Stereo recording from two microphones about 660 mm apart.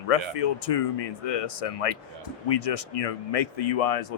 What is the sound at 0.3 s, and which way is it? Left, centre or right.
Speech, left.